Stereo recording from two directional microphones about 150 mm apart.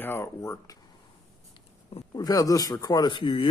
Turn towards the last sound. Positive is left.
turn(degrees=35)  # may be behind; listen again after turning